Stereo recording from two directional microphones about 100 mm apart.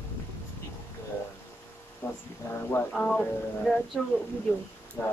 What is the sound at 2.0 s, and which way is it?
Speech, 25° left (ahead or behind).